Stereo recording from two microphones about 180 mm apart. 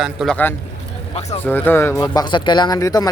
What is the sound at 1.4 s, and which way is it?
A man's voice, 10° left (ahead or behind).